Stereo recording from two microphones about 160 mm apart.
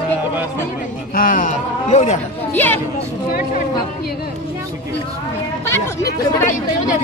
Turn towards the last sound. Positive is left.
turn(degrees=20)  # may be behind; listen again after turning